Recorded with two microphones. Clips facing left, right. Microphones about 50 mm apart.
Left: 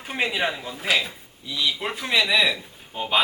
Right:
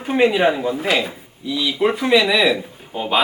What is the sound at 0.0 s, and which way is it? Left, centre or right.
Speech, centre.